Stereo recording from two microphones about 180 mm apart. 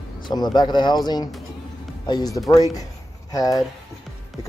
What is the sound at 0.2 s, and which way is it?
Speech, 25° left (ahead or behind).